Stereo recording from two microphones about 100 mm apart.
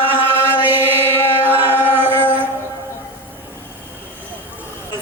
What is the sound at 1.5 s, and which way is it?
Chant, 20° right (ahead or behind).